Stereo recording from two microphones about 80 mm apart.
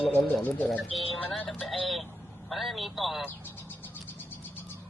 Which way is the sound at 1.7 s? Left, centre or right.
Centre.